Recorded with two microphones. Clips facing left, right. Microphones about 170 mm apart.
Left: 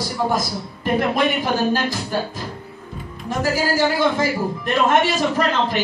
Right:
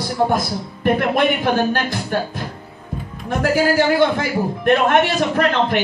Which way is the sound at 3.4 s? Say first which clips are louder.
Right 3 dB; 60° right (ahead or behind).